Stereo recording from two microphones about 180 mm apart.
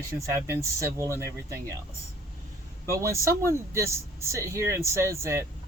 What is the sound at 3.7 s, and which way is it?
Speech, 15° right (ahead or behind).